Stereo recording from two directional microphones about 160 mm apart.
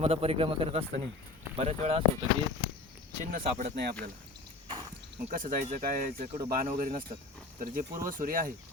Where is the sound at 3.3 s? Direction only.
65° right (ahead or behind).